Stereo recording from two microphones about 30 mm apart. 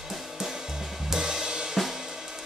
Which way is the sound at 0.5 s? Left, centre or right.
Centre.